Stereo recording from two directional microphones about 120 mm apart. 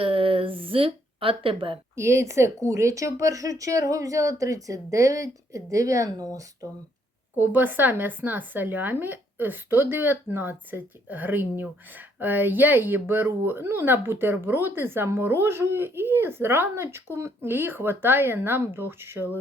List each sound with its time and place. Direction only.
0.0 s a sound: 50° right (ahead or behind)
2.0 s speech: 25° right (ahead or behind)
7.3 s speech: 15° right (ahead or behind)